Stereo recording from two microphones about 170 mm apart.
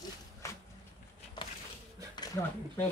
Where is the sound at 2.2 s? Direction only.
20° left (ahead or behind).